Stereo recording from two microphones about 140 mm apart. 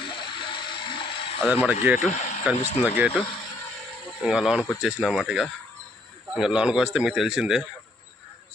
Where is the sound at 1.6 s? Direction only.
10° right (ahead or behind).